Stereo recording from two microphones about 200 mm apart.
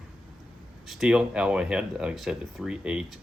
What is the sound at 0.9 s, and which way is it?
Speech, 5° right (ahead or behind).